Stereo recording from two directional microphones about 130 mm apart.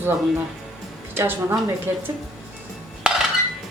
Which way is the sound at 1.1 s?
15° right (ahead or behind).